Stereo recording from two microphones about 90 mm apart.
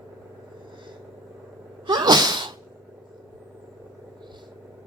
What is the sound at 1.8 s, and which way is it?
Sneeze, 50° right (ahead or behind).